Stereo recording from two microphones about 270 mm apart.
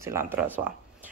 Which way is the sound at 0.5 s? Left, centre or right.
Centre.